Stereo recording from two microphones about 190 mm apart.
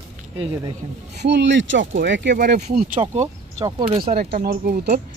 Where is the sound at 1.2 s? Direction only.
65° right (ahead or behind).